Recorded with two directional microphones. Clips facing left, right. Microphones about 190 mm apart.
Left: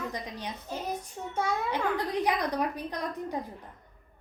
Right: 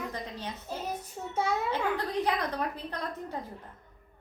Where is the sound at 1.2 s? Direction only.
5° right (ahead or behind).